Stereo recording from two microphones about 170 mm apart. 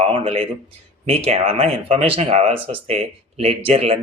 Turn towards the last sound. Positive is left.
turn(degrees=-35)  # may be behind; listen again after turning